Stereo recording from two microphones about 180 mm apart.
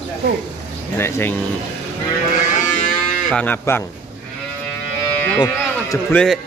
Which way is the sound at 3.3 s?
10° left (ahead or behind).